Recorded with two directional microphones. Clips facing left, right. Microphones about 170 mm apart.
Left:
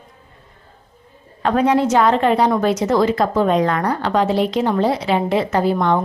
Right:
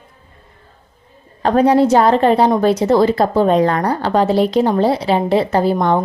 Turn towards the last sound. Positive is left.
turn(degrees=-35)  # may be behind; listen again after turning